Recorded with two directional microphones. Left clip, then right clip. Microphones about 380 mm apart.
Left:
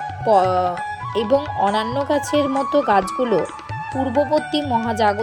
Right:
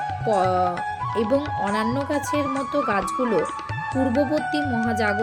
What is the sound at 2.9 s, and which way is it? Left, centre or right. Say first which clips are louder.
Speech: left 5 dB; centre.